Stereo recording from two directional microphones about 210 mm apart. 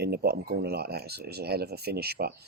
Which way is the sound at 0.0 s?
50° right (ahead or behind).